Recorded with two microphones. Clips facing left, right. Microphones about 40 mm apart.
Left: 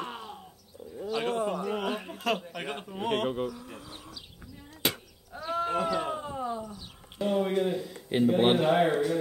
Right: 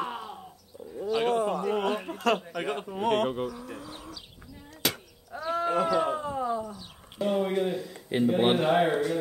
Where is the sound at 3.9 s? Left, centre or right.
Centre.